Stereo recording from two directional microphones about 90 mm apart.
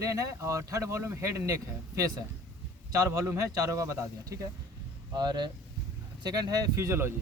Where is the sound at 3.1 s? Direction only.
30° right (ahead or behind).